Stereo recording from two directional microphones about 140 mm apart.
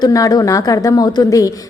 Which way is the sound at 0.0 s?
25° left (ahead or behind).